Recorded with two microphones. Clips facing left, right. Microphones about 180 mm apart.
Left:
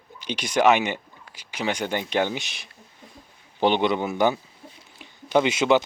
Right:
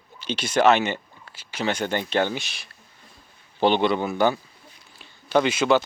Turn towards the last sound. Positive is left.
turn(degrees=20)  # may be behind; listen again after turning